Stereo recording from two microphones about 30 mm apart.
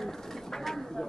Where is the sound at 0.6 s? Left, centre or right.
Centre.